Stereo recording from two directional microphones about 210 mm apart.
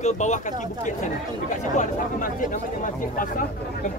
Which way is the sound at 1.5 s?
40° left (ahead or behind).